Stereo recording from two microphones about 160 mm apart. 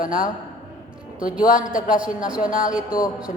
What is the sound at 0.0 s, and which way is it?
A man's voice, 60° left (ahead or behind).